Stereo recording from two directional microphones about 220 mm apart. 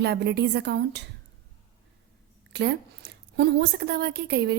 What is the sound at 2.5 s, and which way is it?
A woman's voice, 50° right (ahead or behind).